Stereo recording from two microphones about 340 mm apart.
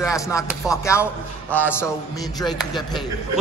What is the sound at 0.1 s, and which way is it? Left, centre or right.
Speech, centre.